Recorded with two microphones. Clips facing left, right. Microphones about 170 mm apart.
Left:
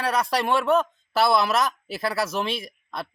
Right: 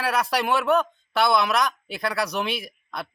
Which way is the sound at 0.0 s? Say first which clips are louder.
Even; centre (ahead or behind).